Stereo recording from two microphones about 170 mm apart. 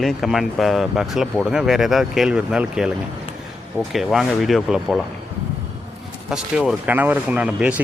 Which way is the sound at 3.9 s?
Centre (ahead or behind).